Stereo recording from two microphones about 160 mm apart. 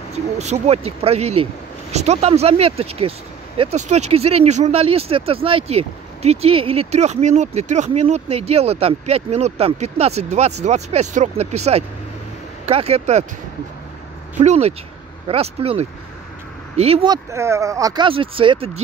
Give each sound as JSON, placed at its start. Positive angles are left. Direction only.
{"t": 0.4, "sound": "speech", "side_deg": -45}
{"t": 14.3, "sound": "speech", "side_deg": -45}
{"t": 17.1, "sound": "speech", "side_deg": -15}